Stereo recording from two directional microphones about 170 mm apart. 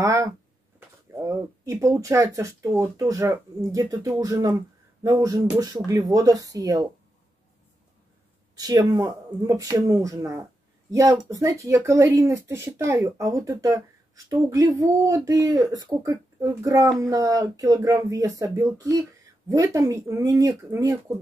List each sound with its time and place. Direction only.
0.0 s a sound: 20° right (ahead or behind)
0.7 s speech: 15° right (ahead or behind)
8.5 s speech: 20° right (ahead or behind)